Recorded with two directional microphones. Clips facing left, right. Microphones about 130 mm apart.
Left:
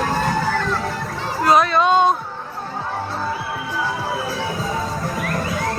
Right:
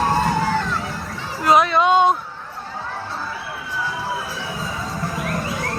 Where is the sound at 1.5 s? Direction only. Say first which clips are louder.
Even; 15° right (ahead or behind).